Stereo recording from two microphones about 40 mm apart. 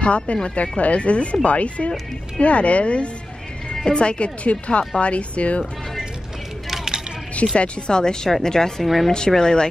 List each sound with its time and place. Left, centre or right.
0.0 s a woman's voice: left
6.7 s vehicle: centre
7.5 s speech: left
8.8 s a woman's voice: centre
9.3 s speech: centre